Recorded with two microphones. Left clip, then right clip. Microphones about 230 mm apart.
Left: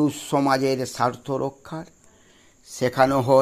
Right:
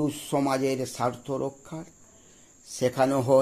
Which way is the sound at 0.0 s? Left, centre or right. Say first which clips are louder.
Left 5 dB; left.